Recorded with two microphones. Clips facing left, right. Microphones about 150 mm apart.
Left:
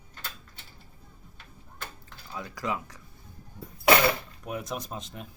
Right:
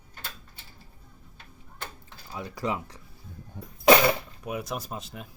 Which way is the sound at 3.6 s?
90° right.